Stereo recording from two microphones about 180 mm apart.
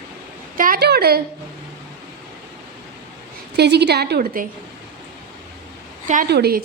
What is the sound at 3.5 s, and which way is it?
Speech, 70° right (ahead or behind).